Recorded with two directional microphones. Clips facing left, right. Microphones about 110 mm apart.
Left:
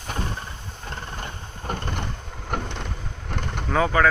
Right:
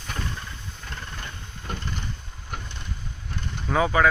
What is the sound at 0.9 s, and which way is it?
Mechanisms, 35° left (ahead or behind).